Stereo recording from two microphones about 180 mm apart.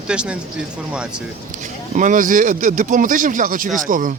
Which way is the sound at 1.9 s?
45° right (ahead or behind).